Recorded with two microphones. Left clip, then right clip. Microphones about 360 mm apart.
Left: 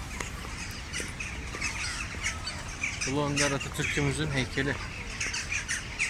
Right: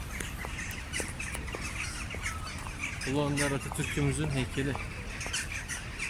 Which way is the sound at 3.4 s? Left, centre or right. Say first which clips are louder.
Left 4 dB; centre.